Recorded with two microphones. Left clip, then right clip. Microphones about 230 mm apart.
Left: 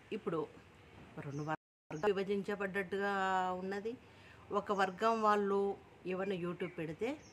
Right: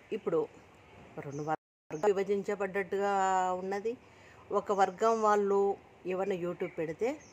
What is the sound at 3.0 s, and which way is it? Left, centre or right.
Speech, centre.